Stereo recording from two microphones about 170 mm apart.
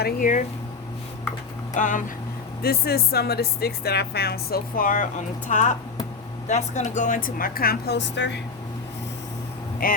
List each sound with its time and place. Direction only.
0.0 s speech: 50° left (ahead or behind)
1.7 s speech: 50° left (ahead or behind)
2.6 s speech: 65° left (ahead or behind); by 8.3 s 90° left
9.8 s speech: 60° left (ahead or behind)